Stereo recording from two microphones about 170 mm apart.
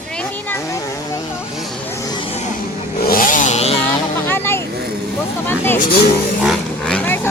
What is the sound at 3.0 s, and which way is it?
Vehicle, 55° left (ahead or behind).